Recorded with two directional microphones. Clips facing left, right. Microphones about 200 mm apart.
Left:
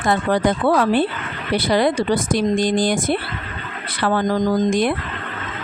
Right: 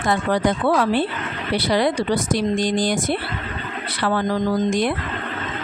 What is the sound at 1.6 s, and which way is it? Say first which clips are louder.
Speech: left 2 dB; 50° left (ahead or behind).